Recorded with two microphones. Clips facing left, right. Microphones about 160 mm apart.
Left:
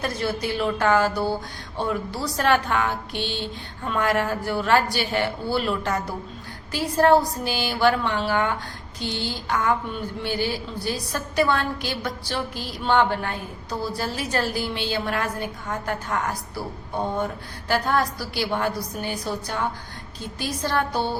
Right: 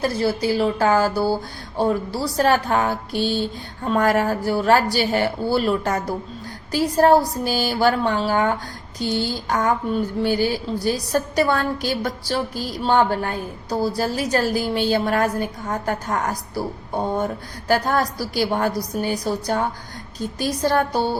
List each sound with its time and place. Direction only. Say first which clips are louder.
0.0 s a woman's voice: right 5 dB; 30° right (ahead or behind)
17.7 s a woman's voice: right 3 dB; 40° right (ahead or behind)